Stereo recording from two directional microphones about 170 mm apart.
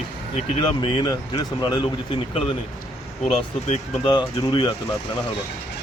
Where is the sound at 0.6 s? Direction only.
25° left (ahead or behind).